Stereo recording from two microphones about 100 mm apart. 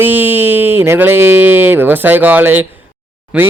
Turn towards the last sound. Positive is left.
turn(degrees=-10)  # may be behind; listen again after turning